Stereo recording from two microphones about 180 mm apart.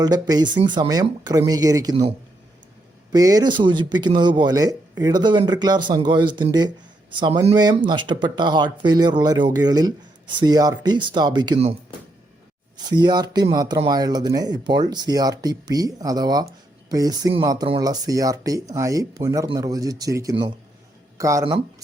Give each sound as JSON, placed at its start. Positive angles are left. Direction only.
{"t": 0.0, "sound": "speech", "side_deg": -20}
{"t": 3.1, "sound": "speech", "side_deg": -20}
{"t": 12.7, "sound": "speech", "side_deg": -25}